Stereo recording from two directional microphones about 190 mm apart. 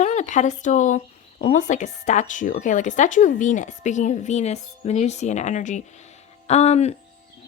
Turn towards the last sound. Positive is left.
turn(degrees=35)  # may be behind; listen again after turning